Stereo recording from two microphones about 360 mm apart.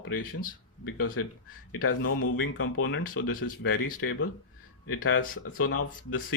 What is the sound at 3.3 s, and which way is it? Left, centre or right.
Speech, left.